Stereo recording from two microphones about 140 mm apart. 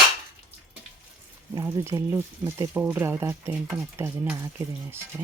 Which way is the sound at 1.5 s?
20° right (ahead or behind).